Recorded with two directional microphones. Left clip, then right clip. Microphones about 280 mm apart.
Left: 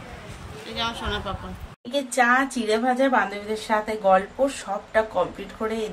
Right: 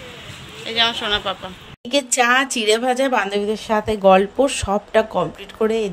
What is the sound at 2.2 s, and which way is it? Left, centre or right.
A woman's voice, right.